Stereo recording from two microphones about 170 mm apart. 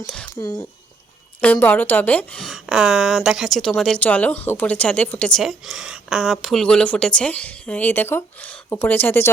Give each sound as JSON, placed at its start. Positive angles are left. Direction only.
{"t": 0.3, "sound": "speech", "side_deg": 20}
{"t": 1.4, "sound": "a woman's voice", "side_deg": 10}